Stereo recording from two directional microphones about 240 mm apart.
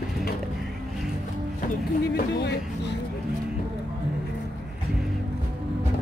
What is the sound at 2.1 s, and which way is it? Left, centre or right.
Speech, left.